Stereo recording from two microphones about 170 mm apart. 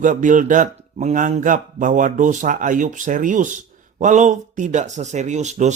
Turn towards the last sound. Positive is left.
turn(degrees=-45)  # may be behind; listen again after turning